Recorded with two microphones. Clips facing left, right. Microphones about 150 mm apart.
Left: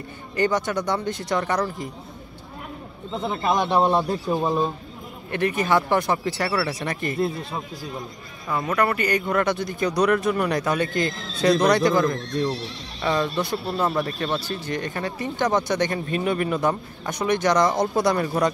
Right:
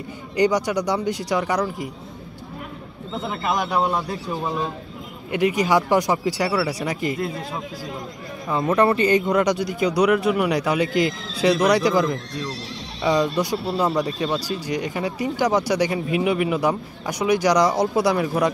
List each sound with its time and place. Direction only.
0.4 s speech: 15° right (ahead or behind)
3.3 s speech: 25° left (ahead or behind)
5.3 s speech: 15° right (ahead or behind)
8.5 s speech: 25° right (ahead or behind); by 18.5 s 5° right (ahead or behind)